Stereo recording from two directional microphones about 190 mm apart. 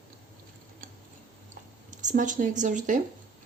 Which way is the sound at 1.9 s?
40° right (ahead or behind).